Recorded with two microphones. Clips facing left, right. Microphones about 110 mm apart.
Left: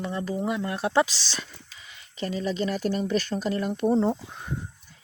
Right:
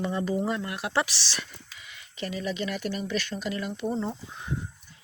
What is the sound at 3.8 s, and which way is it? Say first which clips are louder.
Speech: left 8 dB; 55° left (ahead or behind).